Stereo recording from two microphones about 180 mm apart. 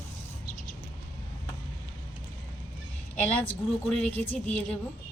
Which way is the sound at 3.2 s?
10° left (ahead or behind).